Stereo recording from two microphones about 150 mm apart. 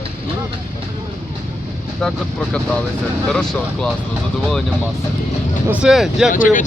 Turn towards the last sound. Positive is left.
turn(degrees=65)  # may be behind; listen again after turning